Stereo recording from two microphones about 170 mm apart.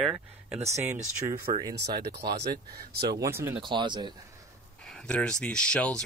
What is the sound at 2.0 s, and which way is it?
Speech, 75° right (ahead or behind).